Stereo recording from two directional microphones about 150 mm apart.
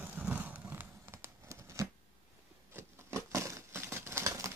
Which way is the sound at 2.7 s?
15° right (ahead or behind).